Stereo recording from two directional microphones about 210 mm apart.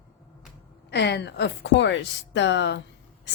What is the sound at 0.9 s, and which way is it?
Speech, 55° left (ahead or behind).